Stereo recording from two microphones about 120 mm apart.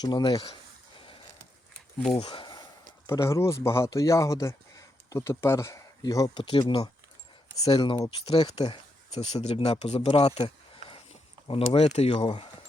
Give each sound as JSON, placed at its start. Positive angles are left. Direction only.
{"t": 0.0, "sound": "speech", "side_deg": 35}
{"t": 2.1, "sound": "speech", "side_deg": 45}
{"t": 3.1, "sound": "speech", "side_deg": 25}
{"t": 8.4, "sound": "speech", "side_deg": 35}
{"t": 9.1, "sound": "speech", "side_deg": 65}
{"t": 10.1, "sound": "speech", "side_deg": 55}
{"t": 11.4, "sound": "speech", "side_deg": 50}